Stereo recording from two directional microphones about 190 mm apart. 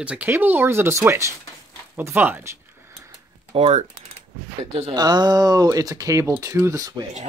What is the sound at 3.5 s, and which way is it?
Speech, 35° right (ahead or behind).